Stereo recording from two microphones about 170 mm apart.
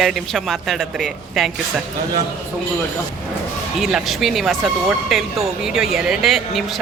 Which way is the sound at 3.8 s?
Centre (ahead or behind).